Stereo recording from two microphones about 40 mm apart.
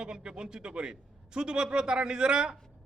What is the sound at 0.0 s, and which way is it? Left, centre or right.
A man's voice, right.